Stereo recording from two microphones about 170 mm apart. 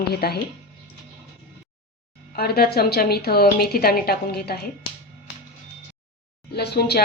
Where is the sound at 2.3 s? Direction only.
65° left (ahead or behind).